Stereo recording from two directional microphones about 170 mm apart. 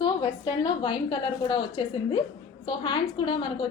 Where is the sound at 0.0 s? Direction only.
25° left (ahead or behind).